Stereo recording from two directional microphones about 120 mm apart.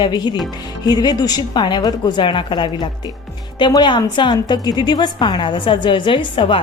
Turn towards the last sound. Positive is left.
turn(degrees=45)  # may be behind; listen again after turning